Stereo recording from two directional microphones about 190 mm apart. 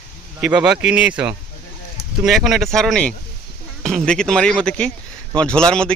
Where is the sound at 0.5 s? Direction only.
5° right (ahead or behind).